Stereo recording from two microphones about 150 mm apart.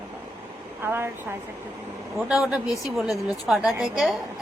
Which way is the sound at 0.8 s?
15° right (ahead or behind).